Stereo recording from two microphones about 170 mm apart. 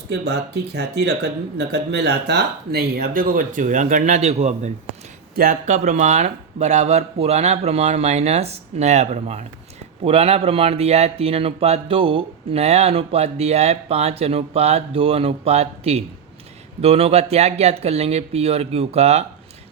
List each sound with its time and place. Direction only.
0.1 s speech: 75° right (ahead or behind); by 4.7 s 40° right (ahead or behind)
5.3 s speech: 60° right (ahead or behind)
5.6 s a man's voice: 45° right (ahead or behind)